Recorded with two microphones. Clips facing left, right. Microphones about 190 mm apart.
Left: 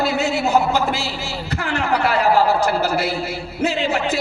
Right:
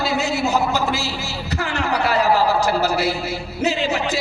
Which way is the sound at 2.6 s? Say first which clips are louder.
Even; 55° left (ahead or behind).